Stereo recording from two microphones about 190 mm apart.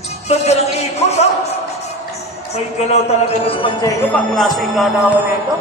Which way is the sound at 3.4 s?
25° left (ahead or behind).